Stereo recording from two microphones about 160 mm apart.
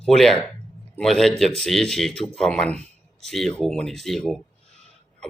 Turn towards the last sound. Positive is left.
turn(degrees=5)  # may be behind; listen again after turning